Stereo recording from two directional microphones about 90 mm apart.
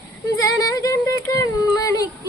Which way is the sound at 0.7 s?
40° left (ahead or behind).